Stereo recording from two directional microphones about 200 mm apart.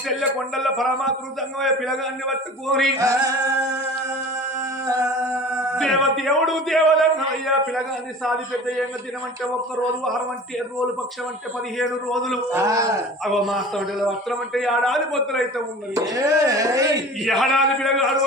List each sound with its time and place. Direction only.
0.2 s a man's voice: centre (ahead or behind)
3.0 s speech: 15° right (ahead or behind)
4.9 s speech: 15° right (ahead or behind)
5.5 s a man's voice: centre (ahead or behind)
11.8 s a man's voice: centre (ahead or behind)
12.5 s speech: 15° right (ahead or behind)
13.2 s a man's voice: centre (ahead or behind)
16.0 s speech: 15° right (ahead or behind)
17.2 s a man's voice: centre (ahead or behind)